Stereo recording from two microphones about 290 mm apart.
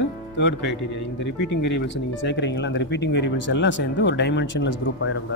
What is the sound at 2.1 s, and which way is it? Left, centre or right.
Speech, left.